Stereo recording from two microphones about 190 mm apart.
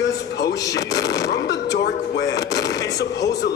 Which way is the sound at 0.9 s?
65° left (ahead or behind).